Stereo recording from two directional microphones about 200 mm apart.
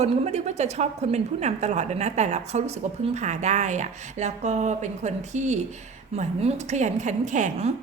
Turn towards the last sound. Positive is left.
turn(degrees=-35)  # may be behind; listen again after turning